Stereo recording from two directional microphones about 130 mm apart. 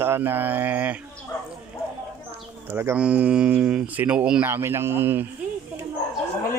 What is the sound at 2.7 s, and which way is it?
Speech, 15° right (ahead or behind).